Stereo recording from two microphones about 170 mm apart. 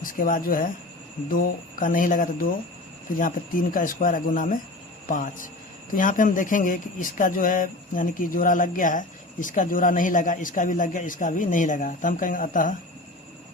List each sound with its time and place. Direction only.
0.0 s speech: 55° left (ahead or behind)